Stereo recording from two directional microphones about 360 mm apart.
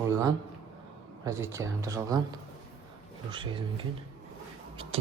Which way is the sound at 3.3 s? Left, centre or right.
Centre.